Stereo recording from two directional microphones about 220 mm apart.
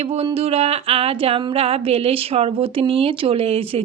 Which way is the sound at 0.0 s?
30° right (ahead or behind).